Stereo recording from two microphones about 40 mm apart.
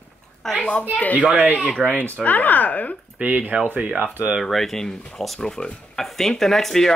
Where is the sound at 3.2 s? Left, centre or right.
Right.